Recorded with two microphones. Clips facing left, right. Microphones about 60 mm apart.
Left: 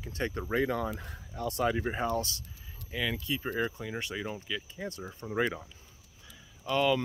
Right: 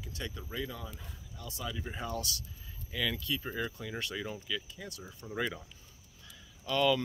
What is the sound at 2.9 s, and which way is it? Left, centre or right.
Speech, left.